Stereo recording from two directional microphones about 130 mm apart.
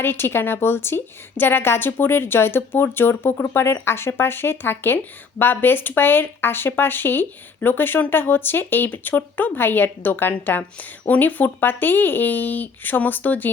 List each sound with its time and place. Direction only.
0.0 s speech: 15° left (ahead or behind)